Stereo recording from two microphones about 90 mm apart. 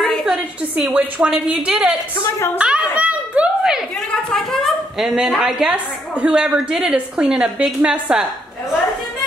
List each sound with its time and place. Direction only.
0.0 s a woman's voice: centre (ahead or behind)
2.2 s a woman's voice: 30° left (ahead or behind)
2.6 s a sound: 10° right (ahead or behind)
4.1 s speech: 5° left (ahead or behind)
5.7 s a woman's voice: 15° right (ahead or behind)